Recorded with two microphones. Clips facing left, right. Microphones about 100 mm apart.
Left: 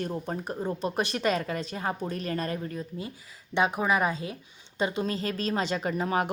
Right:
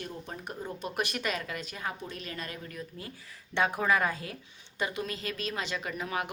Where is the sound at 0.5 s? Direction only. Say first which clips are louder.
Left 4 dB; 30° left (ahead or behind).